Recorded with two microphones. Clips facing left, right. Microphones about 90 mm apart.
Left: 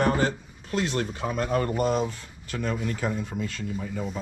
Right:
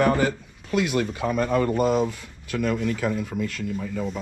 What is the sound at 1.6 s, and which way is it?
Speech, 10° right (ahead or behind).